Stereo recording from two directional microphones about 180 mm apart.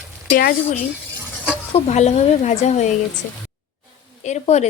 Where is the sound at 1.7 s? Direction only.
40° left (ahead or behind).